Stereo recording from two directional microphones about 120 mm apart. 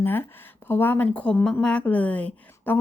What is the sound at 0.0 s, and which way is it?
Speech, 15° left (ahead or behind).